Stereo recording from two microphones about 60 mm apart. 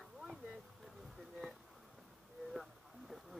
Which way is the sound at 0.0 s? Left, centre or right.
Centre.